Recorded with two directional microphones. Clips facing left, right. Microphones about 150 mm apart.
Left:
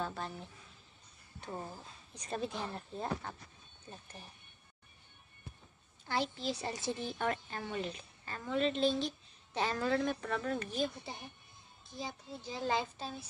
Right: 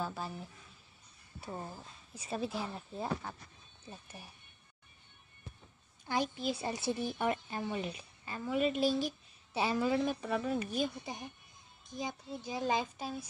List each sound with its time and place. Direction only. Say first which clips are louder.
0.0 s a woman's voice: right 1 dB; 5° right (ahead or behind)
6.0 s a woman's voice: right 2 dB; 15° right (ahead or behind)